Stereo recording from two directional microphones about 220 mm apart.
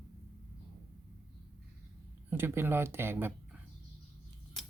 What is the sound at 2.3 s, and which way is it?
Speech, 10° right (ahead or behind).